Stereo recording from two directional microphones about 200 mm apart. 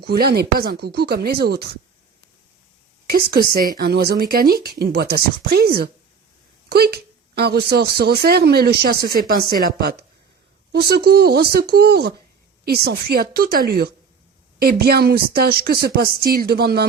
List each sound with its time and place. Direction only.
0.0 s speech: 50° right (ahead or behind)
3.1 s speech: 50° right (ahead or behind)
6.7 s speech: 50° right (ahead or behind)